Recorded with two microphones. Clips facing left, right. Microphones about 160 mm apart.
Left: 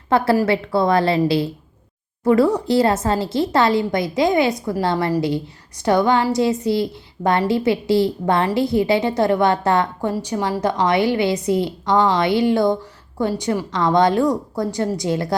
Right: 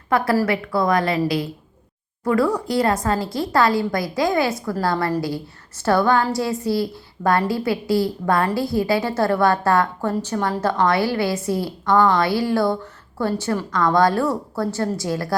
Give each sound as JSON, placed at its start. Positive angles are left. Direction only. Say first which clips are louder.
{"t": 0.1, "sound": "a woman's voice", "louder": "left 2 dB", "side_deg": 25}